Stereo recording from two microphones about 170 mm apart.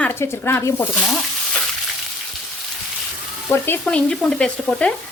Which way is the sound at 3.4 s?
10° left (ahead or behind).